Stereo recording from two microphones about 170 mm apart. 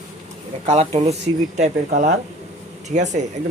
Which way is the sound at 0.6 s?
40° right (ahead or behind).